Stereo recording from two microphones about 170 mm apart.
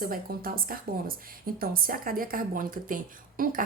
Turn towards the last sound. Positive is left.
turn(degrees=-55)  # may be behind; listen again after turning